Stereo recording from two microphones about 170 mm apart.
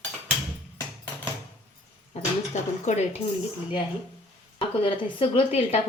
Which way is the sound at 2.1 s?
40° left (ahead or behind).